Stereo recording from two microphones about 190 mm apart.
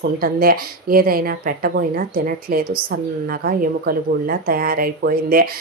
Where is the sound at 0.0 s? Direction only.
50° right (ahead or behind).